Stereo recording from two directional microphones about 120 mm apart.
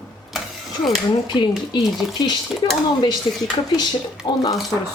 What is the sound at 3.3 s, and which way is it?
Dishes, 50° left (ahead or behind).